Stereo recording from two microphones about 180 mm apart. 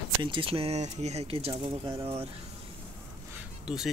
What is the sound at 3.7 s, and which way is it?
Speech, 5° right (ahead or behind).